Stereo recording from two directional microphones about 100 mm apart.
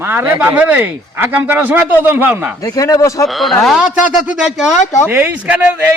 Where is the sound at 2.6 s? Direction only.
35° left (ahead or behind).